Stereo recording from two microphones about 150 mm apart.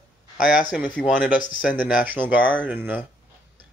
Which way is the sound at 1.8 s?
10° right (ahead or behind).